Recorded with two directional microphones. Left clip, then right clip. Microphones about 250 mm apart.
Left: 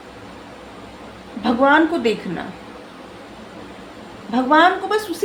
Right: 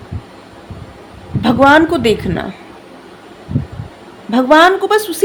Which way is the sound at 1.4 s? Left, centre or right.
Right.